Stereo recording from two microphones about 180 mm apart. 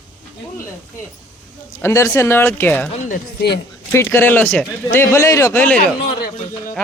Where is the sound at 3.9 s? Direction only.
15° left (ahead or behind).